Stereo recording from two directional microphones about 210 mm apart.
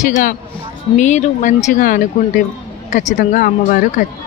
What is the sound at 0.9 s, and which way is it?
Speech, 35° left (ahead or behind).